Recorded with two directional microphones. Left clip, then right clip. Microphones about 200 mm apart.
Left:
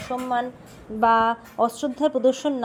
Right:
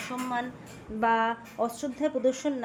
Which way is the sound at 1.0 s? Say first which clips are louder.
Left 7 dB; 25° left (ahead or behind).